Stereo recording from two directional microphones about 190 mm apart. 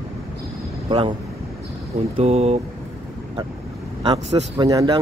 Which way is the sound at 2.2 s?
35° right (ahead or behind).